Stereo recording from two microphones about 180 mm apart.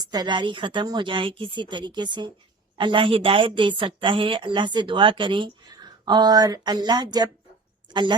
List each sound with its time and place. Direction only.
0.0 s a woman's voice: 20° right (ahead or behind)